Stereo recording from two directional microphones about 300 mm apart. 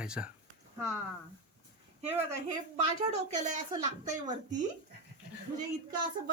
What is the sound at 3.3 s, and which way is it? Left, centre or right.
Speech, right.